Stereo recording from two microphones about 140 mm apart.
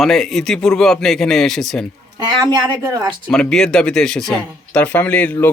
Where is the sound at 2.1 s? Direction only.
30° right (ahead or behind).